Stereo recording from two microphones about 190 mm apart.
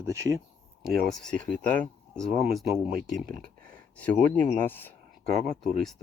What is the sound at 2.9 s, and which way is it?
Speech, 50° right (ahead or behind).